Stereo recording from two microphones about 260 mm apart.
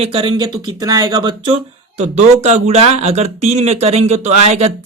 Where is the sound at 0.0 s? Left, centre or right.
Right.